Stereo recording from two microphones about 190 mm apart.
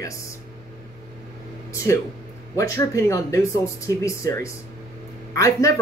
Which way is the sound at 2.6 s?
15° left (ahead or behind).